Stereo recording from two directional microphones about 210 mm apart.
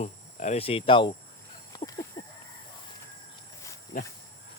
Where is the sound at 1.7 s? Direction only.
15° left (ahead or behind).